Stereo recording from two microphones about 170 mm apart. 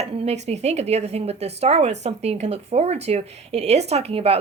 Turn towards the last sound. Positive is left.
turn(degrees=-35)  # may be behind; listen again after turning